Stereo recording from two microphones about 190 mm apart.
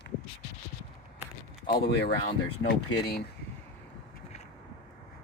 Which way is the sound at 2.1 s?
55° left (ahead or behind).